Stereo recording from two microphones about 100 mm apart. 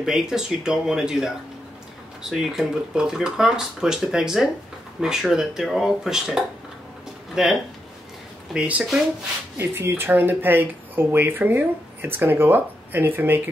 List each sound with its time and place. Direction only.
0.0 s speech: 5° right (ahead or behind)
8.5 s speech: 10° right (ahead or behind)